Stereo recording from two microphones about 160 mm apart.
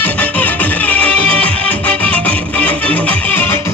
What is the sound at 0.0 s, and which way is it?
Music, 10° left (ahead or behind).